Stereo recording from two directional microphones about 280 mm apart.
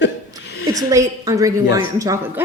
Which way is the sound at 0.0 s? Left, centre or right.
Left.